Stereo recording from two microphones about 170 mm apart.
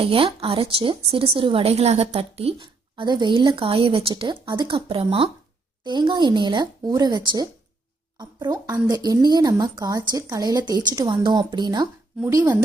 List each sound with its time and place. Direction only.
0.0 s a woman's voice: 30° right (ahead or behind)